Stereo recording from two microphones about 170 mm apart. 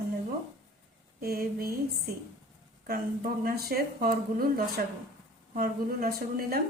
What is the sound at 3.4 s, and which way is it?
A woman's voice, 60° right (ahead or behind).